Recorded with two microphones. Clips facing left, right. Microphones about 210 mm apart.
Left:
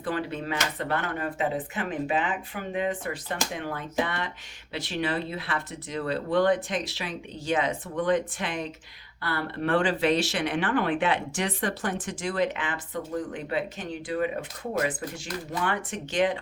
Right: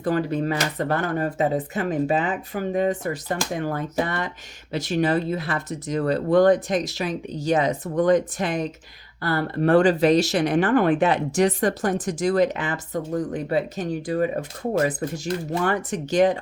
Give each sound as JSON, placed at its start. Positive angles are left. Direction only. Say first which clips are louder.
{"t": 0.0, "sound": "speech", "louder": "right 8 dB", "side_deg": -40}